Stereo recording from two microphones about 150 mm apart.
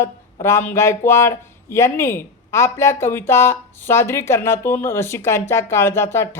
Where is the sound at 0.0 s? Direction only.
15° left (ahead or behind).